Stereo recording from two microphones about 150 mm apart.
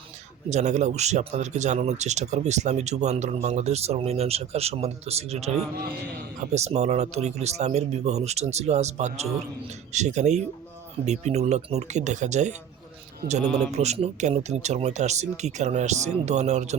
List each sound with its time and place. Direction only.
0.5 s speech: 50° right (ahead or behind)